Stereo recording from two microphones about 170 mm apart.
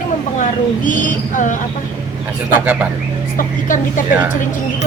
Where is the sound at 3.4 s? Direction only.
50° left (ahead or behind).